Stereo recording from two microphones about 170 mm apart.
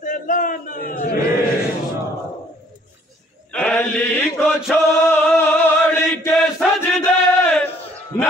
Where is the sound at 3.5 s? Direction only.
5° left (ahead or behind).